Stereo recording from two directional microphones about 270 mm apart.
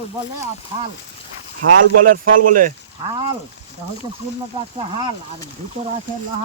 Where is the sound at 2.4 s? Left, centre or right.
Right.